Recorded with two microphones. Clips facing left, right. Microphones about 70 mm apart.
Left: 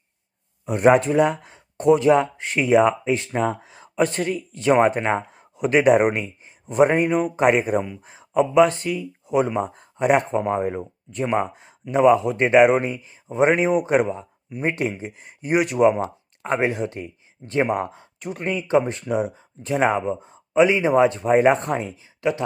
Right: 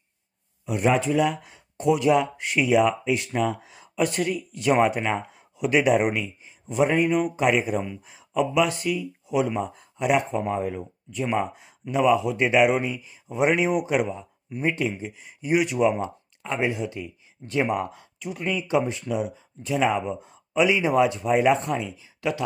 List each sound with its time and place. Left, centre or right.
0.6 s speech: left
14.8 s speech: left
18.2 s speech: left
18.4 s speech: left
22.2 s speech: left